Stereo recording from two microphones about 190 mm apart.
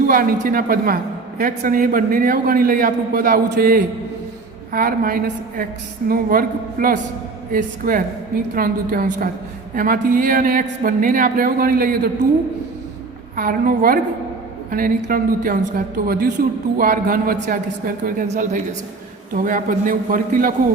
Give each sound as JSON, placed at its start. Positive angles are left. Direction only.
{"t": 0.1, "sound": "a man's voice", "side_deg": -50}
{"t": 13.3, "sound": "a man's voice", "side_deg": -50}